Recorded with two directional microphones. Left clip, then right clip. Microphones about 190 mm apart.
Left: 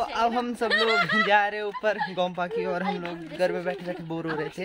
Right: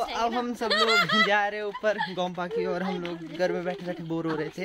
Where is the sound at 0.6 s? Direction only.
25° right (ahead or behind).